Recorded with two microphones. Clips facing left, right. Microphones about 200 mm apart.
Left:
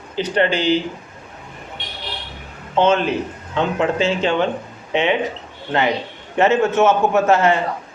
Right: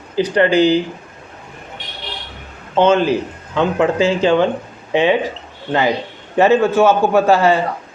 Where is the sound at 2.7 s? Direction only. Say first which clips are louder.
Right 3 dB; 30° right (ahead or behind).